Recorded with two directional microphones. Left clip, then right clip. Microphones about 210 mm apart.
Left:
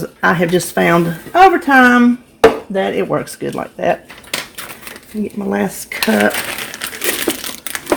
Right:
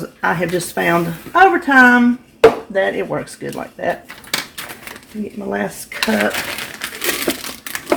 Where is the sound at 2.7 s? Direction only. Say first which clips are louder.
Left 2 dB; 45° left (ahead or behind).